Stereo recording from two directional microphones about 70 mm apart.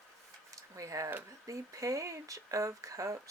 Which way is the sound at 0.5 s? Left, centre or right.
Right.